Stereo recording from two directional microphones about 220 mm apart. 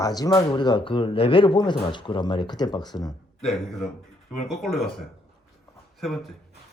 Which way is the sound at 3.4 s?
Centre (ahead or behind).